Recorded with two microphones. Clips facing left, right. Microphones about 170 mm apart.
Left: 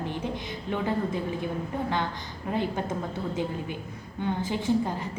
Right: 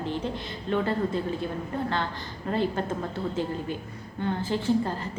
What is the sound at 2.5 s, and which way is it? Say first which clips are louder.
A woman's voice: right 2 dB; 15° left (ahead or behind).